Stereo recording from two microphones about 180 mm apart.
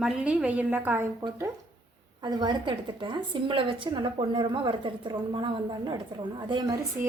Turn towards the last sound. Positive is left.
turn(degrees=-20)  # may be behind; listen again after turning